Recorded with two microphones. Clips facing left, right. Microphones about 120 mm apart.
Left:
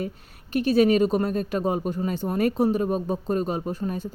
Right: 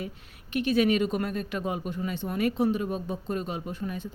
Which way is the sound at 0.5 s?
35° left (ahead or behind).